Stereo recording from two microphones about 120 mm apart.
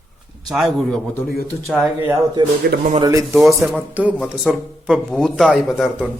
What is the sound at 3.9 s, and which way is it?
Speech, 10° right (ahead or behind).